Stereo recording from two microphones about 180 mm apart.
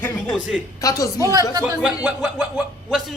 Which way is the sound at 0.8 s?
20° left (ahead or behind).